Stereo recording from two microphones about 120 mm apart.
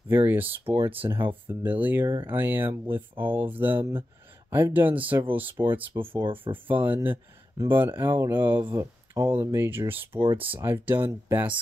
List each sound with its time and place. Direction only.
0.1 s speech: 15° right (ahead or behind)